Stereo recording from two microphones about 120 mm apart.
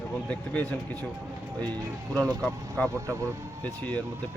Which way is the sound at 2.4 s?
15° left (ahead or behind).